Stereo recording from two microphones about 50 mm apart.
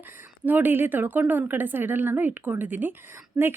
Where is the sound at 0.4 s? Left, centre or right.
Right.